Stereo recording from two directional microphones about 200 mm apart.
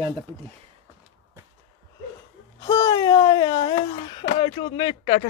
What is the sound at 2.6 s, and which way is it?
Speech, 20° left (ahead or behind).